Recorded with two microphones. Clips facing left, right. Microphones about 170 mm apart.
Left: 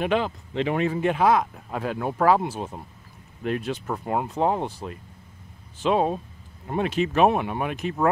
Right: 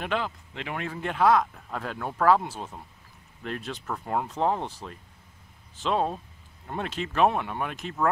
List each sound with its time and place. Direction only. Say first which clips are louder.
0.0 s speech: left 6 dB; 20° left (ahead or behind)
5.8 s speech: left 5 dB; 10° left (ahead or behind)